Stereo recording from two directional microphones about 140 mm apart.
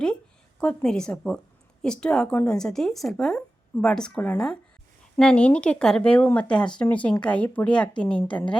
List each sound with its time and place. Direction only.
0.6 s speech: 10° left (ahead or behind)